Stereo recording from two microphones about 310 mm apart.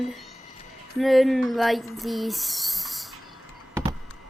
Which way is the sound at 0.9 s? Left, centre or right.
Centre.